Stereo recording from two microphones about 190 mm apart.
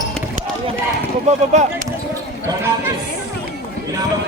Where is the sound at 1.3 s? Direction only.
40° right (ahead or behind).